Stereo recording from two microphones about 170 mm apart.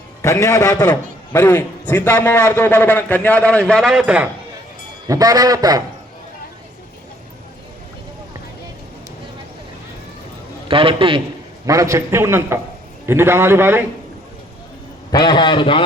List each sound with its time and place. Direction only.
0.2 s a man's voice: 15° left (ahead or behind); by 4.3 s 10° right (ahead or behind)
5.0 s a man's voice: 20° right (ahead or behind)
10.7 s a man's voice: 30° right (ahead or behind)
11.6 s a man's voice: 20° right (ahead or behind)
15.1 s a man's voice: 25° left (ahead or behind)